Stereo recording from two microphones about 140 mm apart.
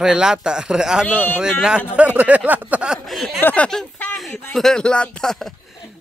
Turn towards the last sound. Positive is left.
turn(degrees=0)  # may be behind; listen again after turning